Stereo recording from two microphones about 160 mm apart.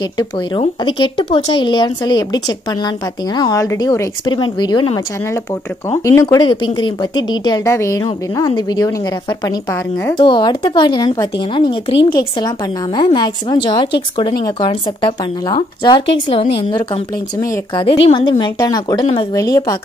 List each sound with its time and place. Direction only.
0.6 s a woman's voice: 30° left (ahead or behind)
6.3 s a woman's voice: 30° left (ahead or behind)
10.1 s a woman's voice: 30° left (ahead or behind)
17.4 s a woman's voice: 20° left (ahead or behind)
18.0 s a woman's voice: 30° left (ahead or behind)